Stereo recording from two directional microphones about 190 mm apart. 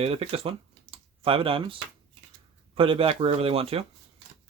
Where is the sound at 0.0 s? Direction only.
30° right (ahead or behind).